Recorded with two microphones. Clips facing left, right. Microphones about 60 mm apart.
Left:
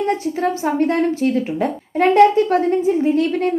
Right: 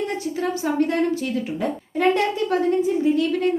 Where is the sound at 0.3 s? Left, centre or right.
Left.